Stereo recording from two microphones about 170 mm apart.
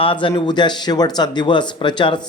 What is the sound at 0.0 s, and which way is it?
Speech, 30° left (ahead or behind).